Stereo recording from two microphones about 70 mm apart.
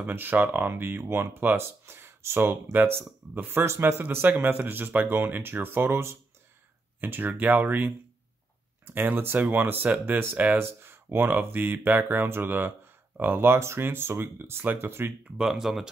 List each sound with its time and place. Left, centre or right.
0.0 s speech: right
15.2 s speech: centre